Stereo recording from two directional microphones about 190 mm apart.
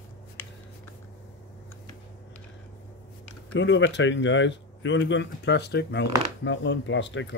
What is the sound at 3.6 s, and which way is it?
Speech, 70° left (ahead or behind).